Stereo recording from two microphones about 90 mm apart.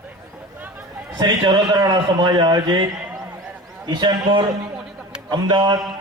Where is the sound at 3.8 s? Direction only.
55° right (ahead or behind).